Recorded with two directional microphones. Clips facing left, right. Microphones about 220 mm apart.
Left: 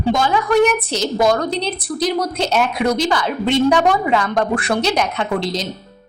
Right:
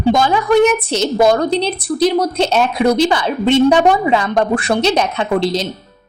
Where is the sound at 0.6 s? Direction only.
25° right (ahead or behind).